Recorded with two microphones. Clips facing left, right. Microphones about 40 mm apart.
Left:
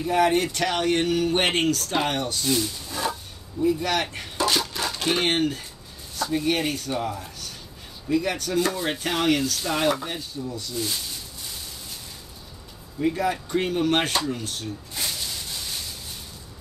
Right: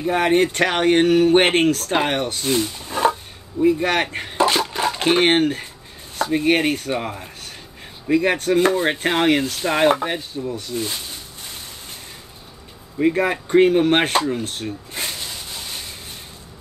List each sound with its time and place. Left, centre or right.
0.0 s speech: right
6.1 s chopping: right
8.1 s speech: right
13.0 s speech: right